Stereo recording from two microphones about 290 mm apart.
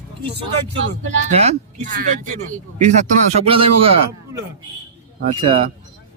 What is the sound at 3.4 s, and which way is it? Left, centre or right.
Speech, centre.